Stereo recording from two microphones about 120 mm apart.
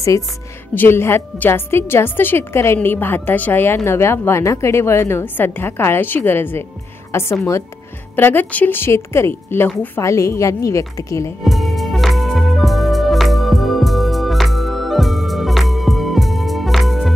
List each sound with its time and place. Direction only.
0.7 s a woman's voice: 20° left (ahead or behind)
11.4 s music: centre (ahead or behind)